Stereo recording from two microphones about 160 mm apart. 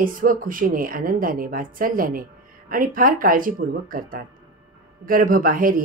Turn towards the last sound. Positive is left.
turn(degrees=-60)  # may be behind; listen again after turning